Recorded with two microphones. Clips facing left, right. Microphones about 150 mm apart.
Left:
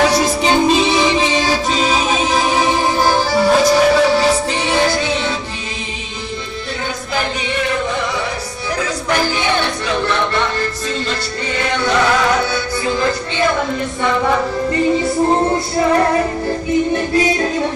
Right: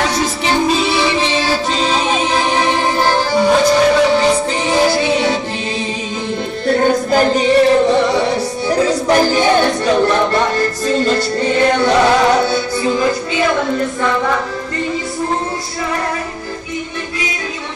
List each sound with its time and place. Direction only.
0.1 s music: 15° left (ahead or behind)
4.7 s music: 5° right (ahead or behind)
6.7 s music: 50° right (ahead or behind)
11.9 s music: 30° right (ahead or behind)